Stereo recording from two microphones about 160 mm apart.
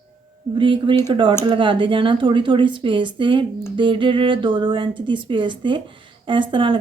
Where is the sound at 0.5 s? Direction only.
30° right (ahead or behind).